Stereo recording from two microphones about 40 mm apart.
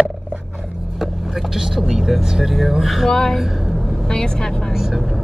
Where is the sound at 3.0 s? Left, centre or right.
Centre.